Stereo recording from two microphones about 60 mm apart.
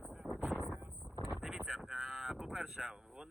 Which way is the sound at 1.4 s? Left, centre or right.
Centre.